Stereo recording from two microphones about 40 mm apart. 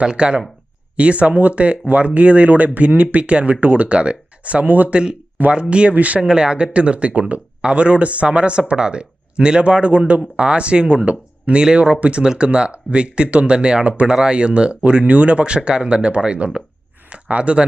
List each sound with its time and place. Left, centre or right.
0.1 s speech: right
5.5 s speech: right
6.2 s speech: right